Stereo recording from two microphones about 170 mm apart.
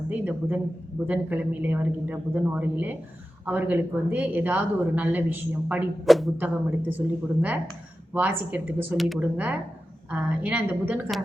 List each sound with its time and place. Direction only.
0.1 s speech: 10° right (ahead or behind)
6.3 s speech: 10° right (ahead or behind)
8.1 s speech: 10° right (ahead or behind)